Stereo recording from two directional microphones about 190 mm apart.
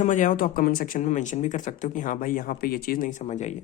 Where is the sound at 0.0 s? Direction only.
40° left (ahead or behind).